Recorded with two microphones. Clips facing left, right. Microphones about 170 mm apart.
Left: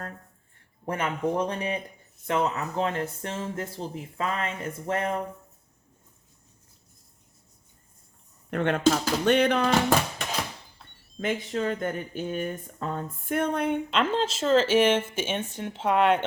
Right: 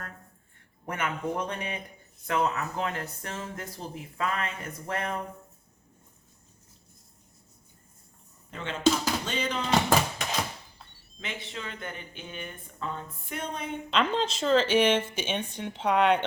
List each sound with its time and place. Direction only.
0.9 s speech: 30° left (ahead or behind)
8.4 s speech: 60° left (ahead or behind)
11.2 s speech: 45° left (ahead or behind)
13.9 s speech: 5° left (ahead or behind)